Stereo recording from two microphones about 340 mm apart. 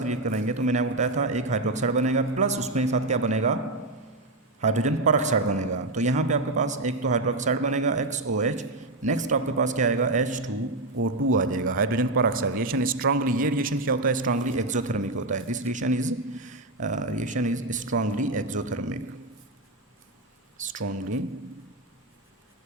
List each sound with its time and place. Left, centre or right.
0.0 s a man's voice: right
4.6 s a man's voice: right